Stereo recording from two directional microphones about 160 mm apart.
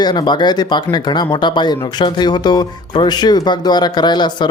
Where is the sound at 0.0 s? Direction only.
25° left (ahead or behind).